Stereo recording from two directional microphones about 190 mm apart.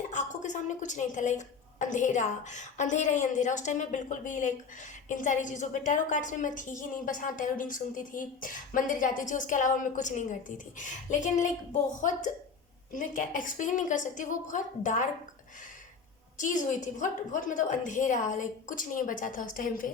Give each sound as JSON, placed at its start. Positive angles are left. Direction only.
{"t": 0.1, "sound": "a woman's voice", "side_deg": 40}
{"t": 16.4, "sound": "a woman's voice", "side_deg": 40}